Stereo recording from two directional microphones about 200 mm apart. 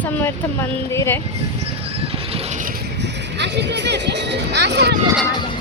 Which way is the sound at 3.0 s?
60° right (ahead or behind).